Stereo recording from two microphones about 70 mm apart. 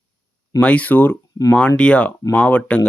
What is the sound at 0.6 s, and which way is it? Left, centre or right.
Speech, centre.